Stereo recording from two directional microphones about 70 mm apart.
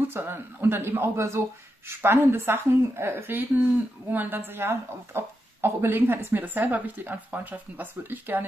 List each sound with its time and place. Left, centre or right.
0.1 s a woman's voice: right